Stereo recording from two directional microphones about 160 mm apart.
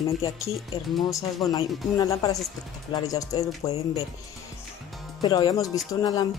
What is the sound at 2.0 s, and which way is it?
Speech, 25° left (ahead or behind).